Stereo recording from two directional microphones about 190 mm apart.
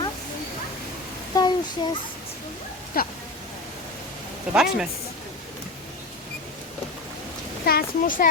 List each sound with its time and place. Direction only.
1.3 s a sound: 20° left (ahead or behind)
3.0 s speech: 50° left (ahead or behind)
4.5 s speech: centre (ahead or behind)
7.6 s speech: 55° left (ahead or behind)